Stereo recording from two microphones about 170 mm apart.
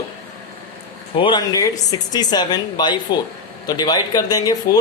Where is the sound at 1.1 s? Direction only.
30° left (ahead or behind).